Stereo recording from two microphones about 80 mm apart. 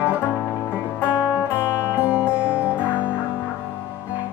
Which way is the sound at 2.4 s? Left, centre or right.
Centre.